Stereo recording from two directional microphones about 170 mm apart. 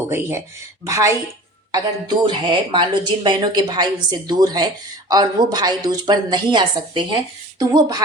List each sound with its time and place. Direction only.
0.1 s speech: 15° right (ahead or behind)